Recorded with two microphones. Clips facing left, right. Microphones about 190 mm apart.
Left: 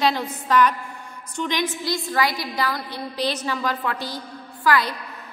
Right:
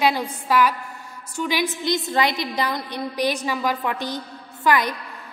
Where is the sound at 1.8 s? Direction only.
20° right (ahead or behind).